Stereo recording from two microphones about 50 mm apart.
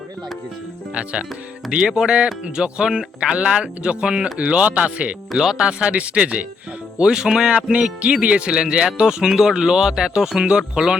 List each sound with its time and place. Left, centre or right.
1.7 s speech: centre
5.3 s speech: centre
5.6 s speech: right
7.0 s speech: centre